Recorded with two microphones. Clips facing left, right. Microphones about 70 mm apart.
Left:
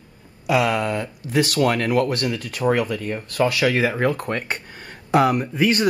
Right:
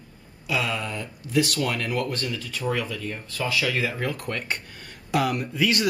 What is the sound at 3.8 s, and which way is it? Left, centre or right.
Speech, left.